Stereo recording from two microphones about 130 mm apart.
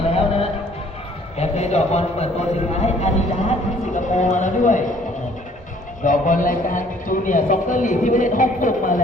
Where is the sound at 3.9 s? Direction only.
70° left (ahead or behind).